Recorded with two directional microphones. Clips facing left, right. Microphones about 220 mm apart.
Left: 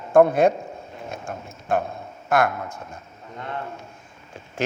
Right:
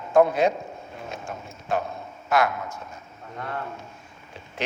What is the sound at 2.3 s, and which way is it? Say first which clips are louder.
Speech: left 2 dB; 50° left (ahead or behind).